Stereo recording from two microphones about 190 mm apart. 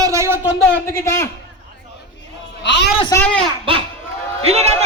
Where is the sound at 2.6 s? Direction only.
65° left (ahead or behind).